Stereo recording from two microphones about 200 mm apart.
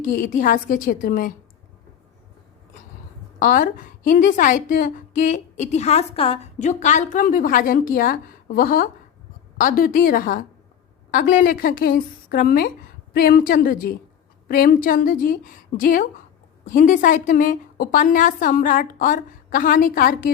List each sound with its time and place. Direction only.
0.0 s a woman's voice: 40° left (ahead or behind)
3.4 s a woman's voice: 40° left (ahead or behind)